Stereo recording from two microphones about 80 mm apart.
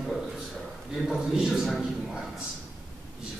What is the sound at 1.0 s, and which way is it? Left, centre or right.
Speech, centre.